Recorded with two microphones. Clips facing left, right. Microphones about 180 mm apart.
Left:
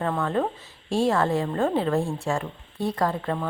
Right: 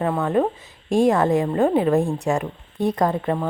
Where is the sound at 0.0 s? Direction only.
15° right (ahead or behind).